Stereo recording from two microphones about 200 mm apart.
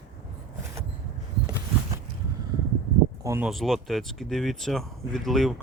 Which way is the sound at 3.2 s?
10° right (ahead or behind).